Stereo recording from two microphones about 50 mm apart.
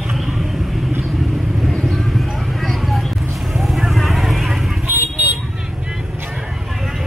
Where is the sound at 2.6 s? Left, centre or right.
Centre.